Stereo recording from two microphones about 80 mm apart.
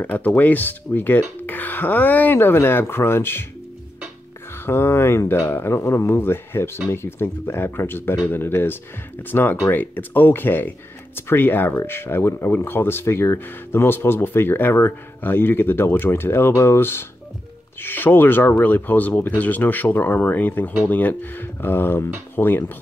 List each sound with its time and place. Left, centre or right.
0.0 s speech: left
4.6 s speech: left